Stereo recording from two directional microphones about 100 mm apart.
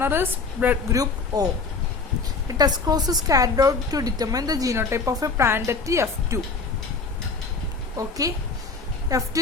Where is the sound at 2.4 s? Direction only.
40° right (ahead or behind).